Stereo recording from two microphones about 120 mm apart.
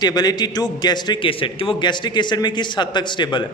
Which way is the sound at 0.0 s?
35° left (ahead or behind).